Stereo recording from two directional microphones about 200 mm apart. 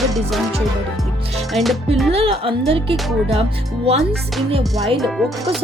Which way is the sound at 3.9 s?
30° right (ahead or behind).